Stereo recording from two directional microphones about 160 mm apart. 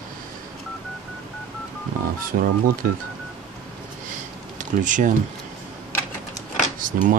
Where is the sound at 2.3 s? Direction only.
65° right (ahead or behind).